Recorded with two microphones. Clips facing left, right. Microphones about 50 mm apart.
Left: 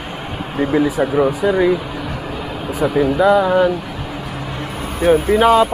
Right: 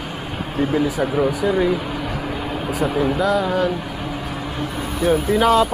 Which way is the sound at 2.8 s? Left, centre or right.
Left.